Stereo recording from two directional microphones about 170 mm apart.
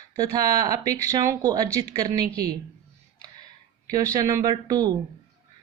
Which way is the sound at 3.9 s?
20° right (ahead or behind).